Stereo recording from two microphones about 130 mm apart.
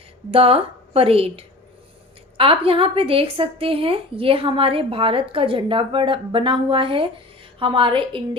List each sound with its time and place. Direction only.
0.3 s a woman's voice: 45° right (ahead or behind)